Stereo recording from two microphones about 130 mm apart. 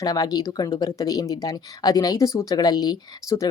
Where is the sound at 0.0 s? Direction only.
30° left (ahead or behind).